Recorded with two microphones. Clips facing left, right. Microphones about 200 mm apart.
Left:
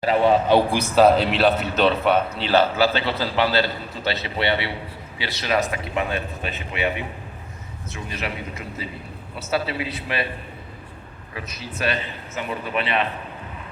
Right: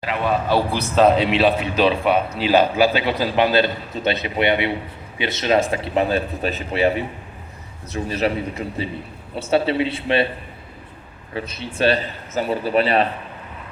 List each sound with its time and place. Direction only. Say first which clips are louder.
0.0 s speech: left 4 dB; 30° left (ahead or behind); by 2.5 s 5° right (ahead or behind)
2.5 s a man's voice: right 3 dB; 15° right (ahead or behind)
11.3 s speech: right 7 dB; 30° right (ahead or behind)